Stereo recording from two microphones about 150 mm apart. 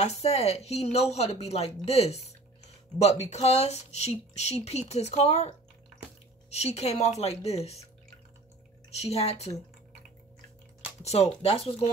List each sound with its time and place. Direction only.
0.0 s speech: 45° left (ahead or behind)
8.9 s speech: 45° left (ahead or behind)
11.0 s speech: 45° left (ahead or behind)